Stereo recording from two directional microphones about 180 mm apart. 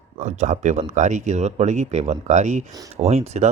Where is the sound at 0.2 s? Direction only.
40° right (ahead or behind).